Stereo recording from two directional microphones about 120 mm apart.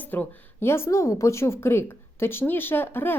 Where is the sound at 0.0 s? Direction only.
15° left (ahead or behind).